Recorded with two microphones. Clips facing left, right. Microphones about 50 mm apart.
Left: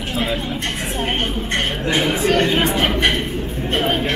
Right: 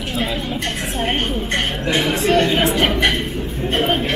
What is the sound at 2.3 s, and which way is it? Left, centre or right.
Speech, centre.